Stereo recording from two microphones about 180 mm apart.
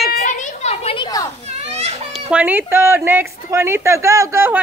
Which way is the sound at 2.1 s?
10° right (ahead or behind).